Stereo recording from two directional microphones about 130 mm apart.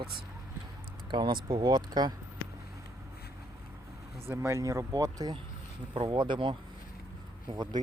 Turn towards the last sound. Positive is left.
turn(degrees=-30)  # may be behind; listen again after turning